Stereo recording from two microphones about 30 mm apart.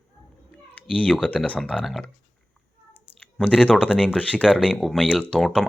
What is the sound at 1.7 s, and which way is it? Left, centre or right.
Speech, centre.